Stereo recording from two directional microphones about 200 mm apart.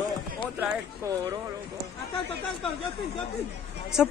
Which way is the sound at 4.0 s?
5° right (ahead or behind).